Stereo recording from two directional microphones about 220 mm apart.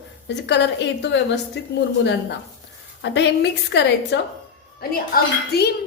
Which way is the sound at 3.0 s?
50° left (ahead or behind).